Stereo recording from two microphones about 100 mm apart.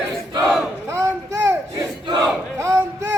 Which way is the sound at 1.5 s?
30° right (ahead or behind).